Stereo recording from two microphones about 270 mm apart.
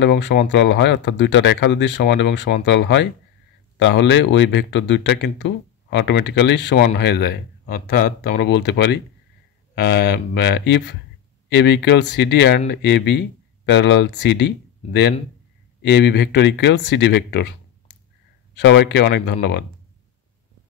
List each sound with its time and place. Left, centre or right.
0.0 s speech: left
18.6 s speech: left